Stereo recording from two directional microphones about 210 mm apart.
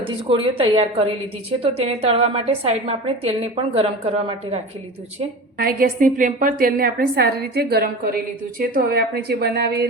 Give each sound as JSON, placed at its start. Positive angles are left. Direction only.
{"t": 0.0, "sound": "a woman's voice", "side_deg": -25}
{"t": 5.5, "sound": "a woman's voice", "side_deg": -45}